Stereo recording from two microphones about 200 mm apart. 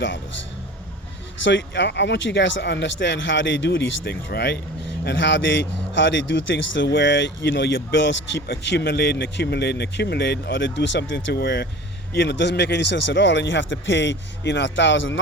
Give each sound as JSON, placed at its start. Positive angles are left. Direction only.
{"t": 1.5, "sound": "a man's voice", "side_deg": 65}